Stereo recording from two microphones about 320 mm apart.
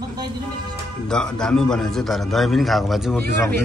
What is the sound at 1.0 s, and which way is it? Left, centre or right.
A man's voice, centre.